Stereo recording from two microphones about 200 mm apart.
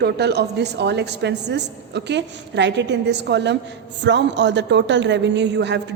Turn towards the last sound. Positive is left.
turn(degrees=-60)  # may be behind; listen again after turning